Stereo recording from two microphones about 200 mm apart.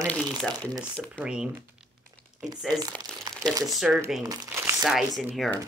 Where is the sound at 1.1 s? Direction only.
5° right (ahead or behind).